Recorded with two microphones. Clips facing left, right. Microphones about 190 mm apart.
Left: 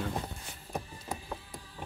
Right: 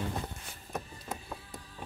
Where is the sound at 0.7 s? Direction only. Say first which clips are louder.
Left 1 dB; 15° left (ahead or behind).